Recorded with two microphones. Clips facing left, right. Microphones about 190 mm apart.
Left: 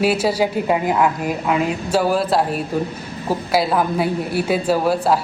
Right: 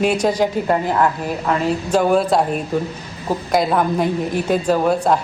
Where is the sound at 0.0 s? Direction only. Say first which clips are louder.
Right 1 dB; 5° left (ahead or behind).